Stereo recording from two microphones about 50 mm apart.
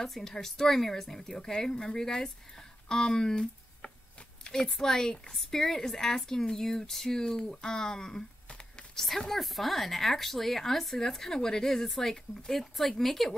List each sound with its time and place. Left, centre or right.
0.0 s speech: centre
4.5 s speech: centre
8.5 s a sound: left
8.9 s speech: centre